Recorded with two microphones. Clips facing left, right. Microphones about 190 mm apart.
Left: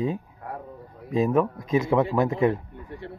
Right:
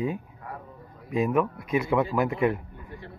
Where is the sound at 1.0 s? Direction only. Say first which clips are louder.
Left 2 dB; 30° left (ahead or behind).